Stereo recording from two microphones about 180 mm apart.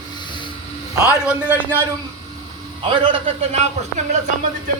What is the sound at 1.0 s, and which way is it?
Speech, 5° right (ahead or behind).